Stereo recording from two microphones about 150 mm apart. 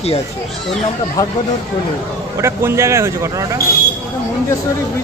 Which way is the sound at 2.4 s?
15° right (ahead or behind).